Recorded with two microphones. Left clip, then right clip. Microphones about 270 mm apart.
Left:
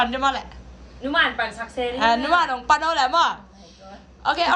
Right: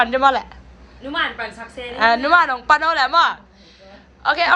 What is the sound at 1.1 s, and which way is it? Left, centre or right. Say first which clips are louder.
Speech: left 2 dB; left.